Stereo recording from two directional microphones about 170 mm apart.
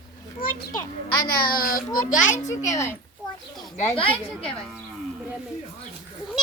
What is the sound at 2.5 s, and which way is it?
Speech, 15° left (ahead or behind).